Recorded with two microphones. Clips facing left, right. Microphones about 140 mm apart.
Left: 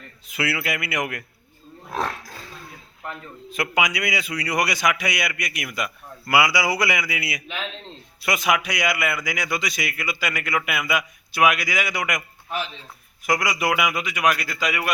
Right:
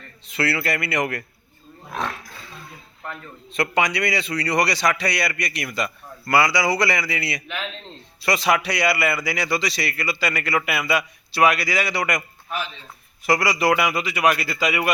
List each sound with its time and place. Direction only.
0.3 s a man's voice: centre (ahead or behind)
1.9 s wild animals: 35° left (ahead or behind)
3.0 s a man's voice: 5° left (ahead or behind)
13.2 s a man's voice: centre (ahead or behind)